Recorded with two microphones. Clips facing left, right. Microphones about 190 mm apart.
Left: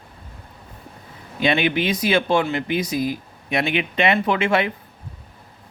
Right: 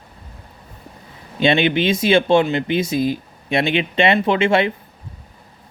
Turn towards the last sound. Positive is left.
turn(degrees=-25)  # may be behind; listen again after turning